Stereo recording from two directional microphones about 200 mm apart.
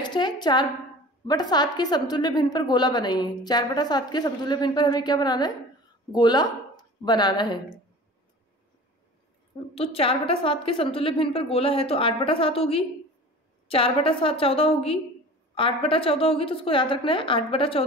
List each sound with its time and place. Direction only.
0.0 s a woman's voice: 20° left (ahead or behind)
9.8 s a woman's voice: 30° left (ahead or behind)